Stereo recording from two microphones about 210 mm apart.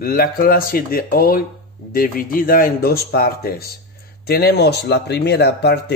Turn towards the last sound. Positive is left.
turn(degrees=55)  # may be behind; listen again after turning